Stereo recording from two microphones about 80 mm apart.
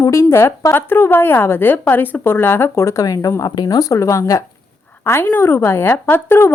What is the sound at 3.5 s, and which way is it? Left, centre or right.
Speech, left.